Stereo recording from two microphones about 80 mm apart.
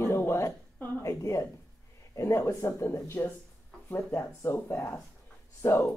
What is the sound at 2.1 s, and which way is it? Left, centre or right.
Speech, left.